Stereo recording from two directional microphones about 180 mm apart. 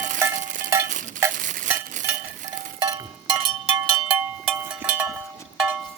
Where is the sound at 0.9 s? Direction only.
45° right (ahead or behind).